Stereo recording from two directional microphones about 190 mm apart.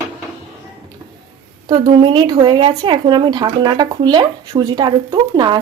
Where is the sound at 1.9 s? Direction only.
25° right (ahead or behind).